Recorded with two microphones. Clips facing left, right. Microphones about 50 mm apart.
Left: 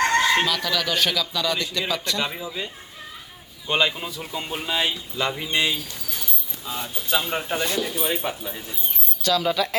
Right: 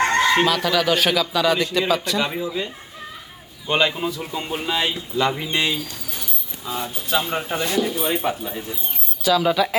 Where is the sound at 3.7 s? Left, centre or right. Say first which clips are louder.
Right 3 dB; centre.